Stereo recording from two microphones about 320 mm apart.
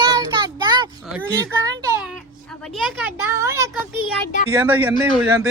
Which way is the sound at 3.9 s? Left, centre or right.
Centre.